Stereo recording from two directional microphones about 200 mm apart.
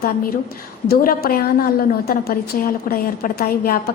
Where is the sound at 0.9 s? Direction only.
50° left (ahead or behind).